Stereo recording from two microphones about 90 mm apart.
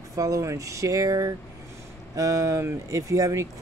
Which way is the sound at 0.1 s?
35° right (ahead or behind).